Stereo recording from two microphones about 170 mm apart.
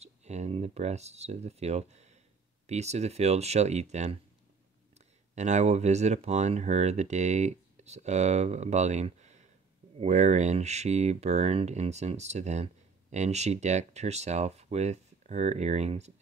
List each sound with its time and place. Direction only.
0.0 s speech: 40° right (ahead or behind)